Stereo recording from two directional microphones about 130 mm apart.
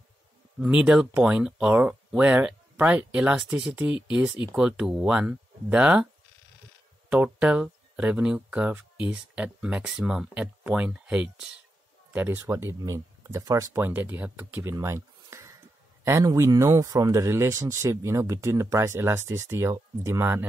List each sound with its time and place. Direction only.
0.6 s speech: 10° right (ahead or behind)
7.1 s speech: 10° right (ahead or behind)